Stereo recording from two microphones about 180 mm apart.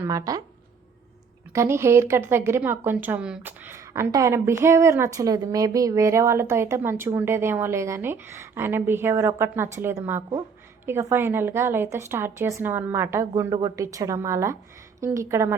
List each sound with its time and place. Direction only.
0.0 s speech: 20° right (ahead or behind)
1.5 s a woman's voice: 15° right (ahead or behind)